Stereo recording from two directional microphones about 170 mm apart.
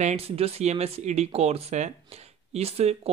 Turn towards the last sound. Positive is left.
turn(degrees=-35)  # may be behind; listen again after turning